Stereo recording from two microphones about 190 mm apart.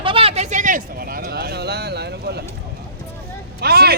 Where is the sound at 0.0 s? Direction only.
30° right (ahead or behind); by 2.4 s 60° right (ahead or behind).